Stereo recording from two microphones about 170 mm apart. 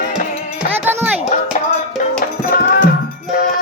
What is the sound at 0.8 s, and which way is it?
Music, 10° right (ahead or behind).